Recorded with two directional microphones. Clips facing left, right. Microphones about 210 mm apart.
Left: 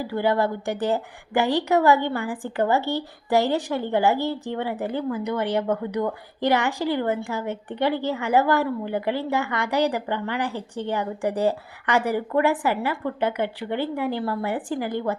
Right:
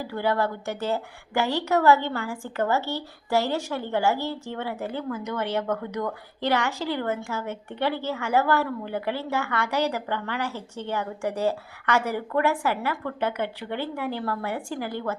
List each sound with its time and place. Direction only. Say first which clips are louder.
0.0 s a woman's voice: left 3 dB; 15° left (ahead or behind)